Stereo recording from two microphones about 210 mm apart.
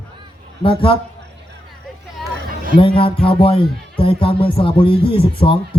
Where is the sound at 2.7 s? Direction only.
25° left (ahead or behind).